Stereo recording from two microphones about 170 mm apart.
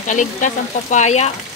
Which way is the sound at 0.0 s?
45° left (ahead or behind).